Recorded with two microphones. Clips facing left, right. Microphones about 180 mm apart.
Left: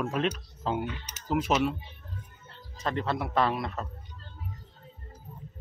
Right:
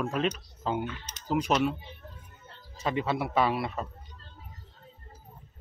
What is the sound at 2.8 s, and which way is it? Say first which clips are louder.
Speech: right 1 dB; 5° right (ahead or behind).